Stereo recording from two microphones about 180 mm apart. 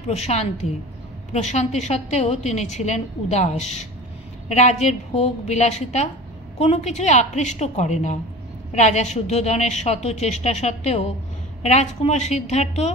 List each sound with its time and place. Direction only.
0.1 s a woman's voice: 35° left (ahead or behind)